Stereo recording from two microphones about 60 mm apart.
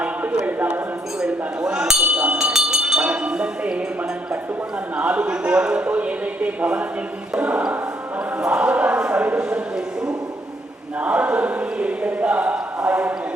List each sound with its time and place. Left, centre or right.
0.0 s a sound: right
0.4 s speech: right
4.9 s speech: centre
11.0 s speech: centre